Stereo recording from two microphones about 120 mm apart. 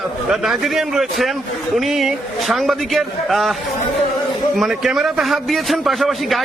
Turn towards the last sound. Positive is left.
turn(degrees=0)  # may be behind; listen again after turning